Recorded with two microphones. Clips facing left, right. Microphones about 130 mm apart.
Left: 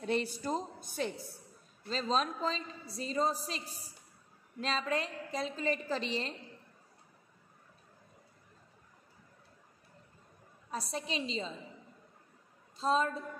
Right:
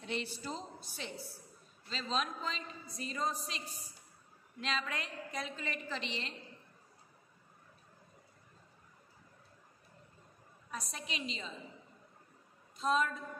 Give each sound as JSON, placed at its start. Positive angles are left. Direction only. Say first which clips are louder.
{"t": 0.0, "sound": "a woman's voice", "louder": "left 7 dB", "side_deg": 40}
{"t": 10.7, "sound": "a woman's voice", "louder": "left 6 dB", "side_deg": 30}
{"t": 12.7, "sound": "a woman's voice", "louder": "left 2 dB", "side_deg": 30}